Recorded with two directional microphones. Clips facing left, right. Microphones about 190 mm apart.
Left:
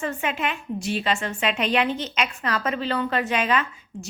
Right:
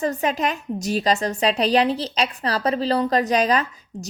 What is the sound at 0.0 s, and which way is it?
A woman's voice, 40° right (ahead or behind).